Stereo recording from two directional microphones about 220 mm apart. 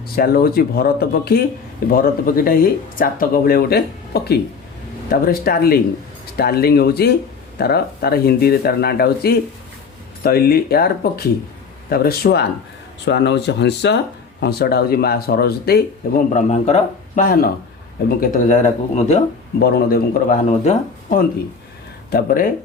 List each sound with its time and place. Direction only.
0.2 s speech: 45° left (ahead or behind)
19.5 s speech: 45° left (ahead or behind)